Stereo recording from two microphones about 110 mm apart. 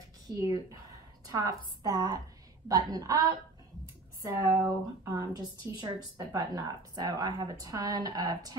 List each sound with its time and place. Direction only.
0.3 s a woman's voice: 35° right (ahead or behind)